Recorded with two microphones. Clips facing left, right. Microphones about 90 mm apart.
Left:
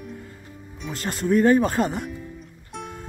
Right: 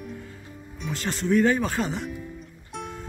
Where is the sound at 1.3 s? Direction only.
40° left (ahead or behind).